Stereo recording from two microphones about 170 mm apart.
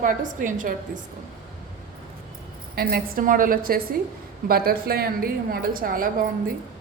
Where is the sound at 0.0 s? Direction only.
50° right (ahead or behind).